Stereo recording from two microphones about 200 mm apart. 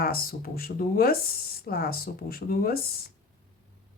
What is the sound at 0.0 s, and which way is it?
Speech, 50° left (ahead or behind).